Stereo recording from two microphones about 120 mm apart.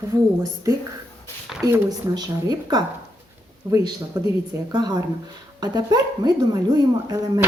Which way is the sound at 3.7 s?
30° right (ahead or behind).